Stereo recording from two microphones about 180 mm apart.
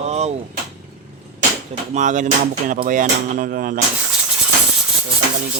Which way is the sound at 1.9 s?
45° right (ahead or behind).